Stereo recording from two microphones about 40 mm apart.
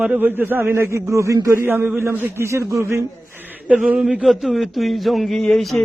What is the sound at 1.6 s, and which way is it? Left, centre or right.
Speech, right.